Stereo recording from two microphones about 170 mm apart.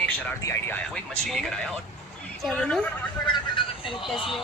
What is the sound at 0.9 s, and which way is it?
A woman's voice, 5° left (ahead or behind).